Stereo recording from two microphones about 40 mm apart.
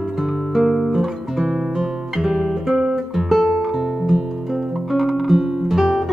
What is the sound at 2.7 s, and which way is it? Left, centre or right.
Guitar, centre.